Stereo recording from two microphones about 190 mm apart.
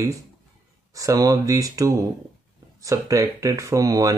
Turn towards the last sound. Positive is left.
turn(degrees=-20)  # may be behind; listen again after turning